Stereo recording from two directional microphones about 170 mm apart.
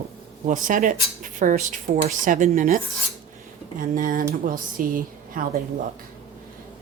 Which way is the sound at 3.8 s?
55° right (ahead or behind).